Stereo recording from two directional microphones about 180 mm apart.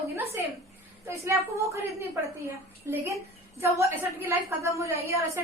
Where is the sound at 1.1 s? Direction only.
15° right (ahead or behind).